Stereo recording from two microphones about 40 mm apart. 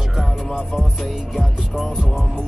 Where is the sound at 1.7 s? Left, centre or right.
Centre.